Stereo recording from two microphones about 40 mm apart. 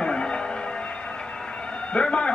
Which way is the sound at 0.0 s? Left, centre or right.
Left.